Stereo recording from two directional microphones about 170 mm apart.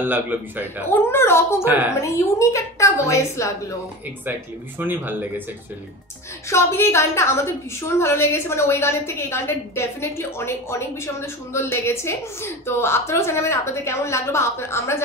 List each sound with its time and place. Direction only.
0.0 s a man's voice: 10° right (ahead or behind)
0.8 s a woman's voice: 15° left (ahead or behind)
1.6 s a man's voice: 10° right (ahead or behind)
2.0 s a woman's voice: 15° left (ahead or behind)
4.3 s a man's voice: 10° right (ahead or behind)
6.5 s a woman's voice: 15° left (ahead or behind)